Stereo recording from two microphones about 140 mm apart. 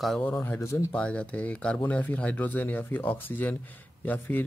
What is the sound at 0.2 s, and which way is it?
Speech, 15° left (ahead or behind).